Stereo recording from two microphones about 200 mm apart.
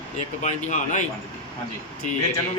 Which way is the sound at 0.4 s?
35° left (ahead or behind).